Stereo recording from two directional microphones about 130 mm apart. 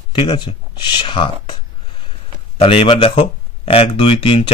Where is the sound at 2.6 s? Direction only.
45° left (ahead or behind).